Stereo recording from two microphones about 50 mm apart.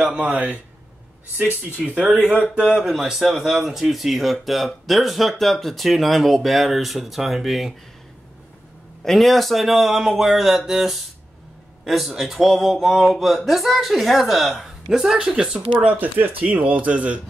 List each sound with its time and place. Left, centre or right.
0.0 s speech: right
2.4 s speech: right
2.8 s speech: centre
9.0 s a woman's voice: centre
15.9 s speech: right